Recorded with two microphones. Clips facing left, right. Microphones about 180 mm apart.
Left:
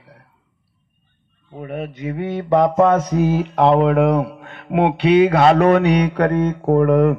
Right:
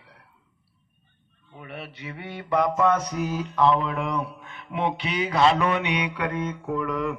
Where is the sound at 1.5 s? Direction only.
45° left (ahead or behind).